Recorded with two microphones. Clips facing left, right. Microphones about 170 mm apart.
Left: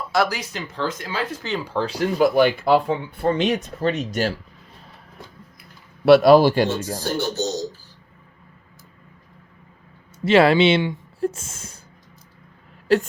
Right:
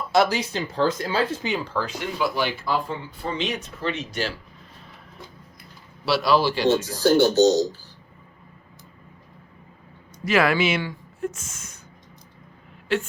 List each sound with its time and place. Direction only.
0.1 s speech: 25° right (ahead or behind)
1.8 s speech: 35° left (ahead or behind)
6.1 s speech: 50° left (ahead or behind)
7.0 s speech: 85° right
10.2 s speech: 30° left (ahead or behind)
12.9 s speech: 40° left (ahead or behind)